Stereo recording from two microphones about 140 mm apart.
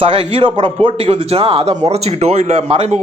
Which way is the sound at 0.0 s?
40° right (ahead or behind).